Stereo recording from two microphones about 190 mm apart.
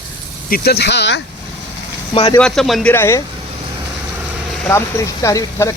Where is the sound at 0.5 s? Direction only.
55° left (ahead or behind).